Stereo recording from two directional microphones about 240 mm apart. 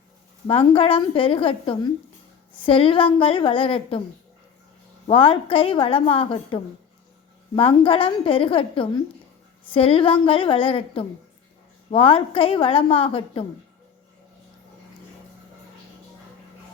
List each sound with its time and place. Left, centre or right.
0.4 s a woman's voice: left
5.0 s a woman's voice: left